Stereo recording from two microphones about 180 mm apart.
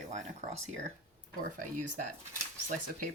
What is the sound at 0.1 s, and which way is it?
Speech, 40° right (ahead or behind).